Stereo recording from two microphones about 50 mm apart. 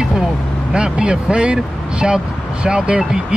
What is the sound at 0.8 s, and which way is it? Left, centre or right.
Speech, right.